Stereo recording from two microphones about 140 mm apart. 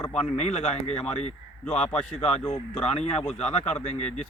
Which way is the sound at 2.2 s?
50° left (ahead or behind).